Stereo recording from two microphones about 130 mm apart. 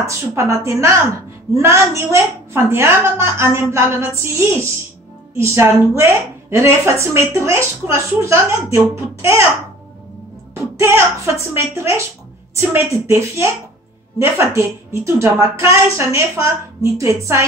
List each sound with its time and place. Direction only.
0.0 s a woman's voice: 25° right (ahead or behind)
11.3 s a woman's voice: 20° right (ahead or behind)